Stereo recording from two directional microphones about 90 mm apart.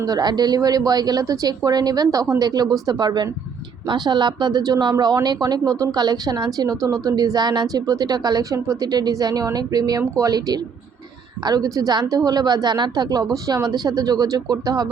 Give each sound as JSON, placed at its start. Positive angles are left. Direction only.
{"t": 0.0, "sound": "speech", "side_deg": -50}